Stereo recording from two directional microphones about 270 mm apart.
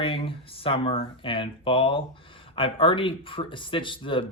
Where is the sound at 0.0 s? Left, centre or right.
Centre.